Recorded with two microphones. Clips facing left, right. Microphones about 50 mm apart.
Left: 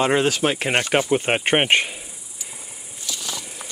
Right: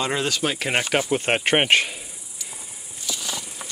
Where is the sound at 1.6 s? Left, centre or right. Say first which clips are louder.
Even; centre.